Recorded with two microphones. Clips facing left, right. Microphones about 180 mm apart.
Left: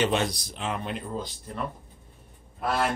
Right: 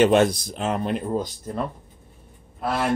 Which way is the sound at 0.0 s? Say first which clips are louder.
Right 9 dB; 50° right (ahead or behind).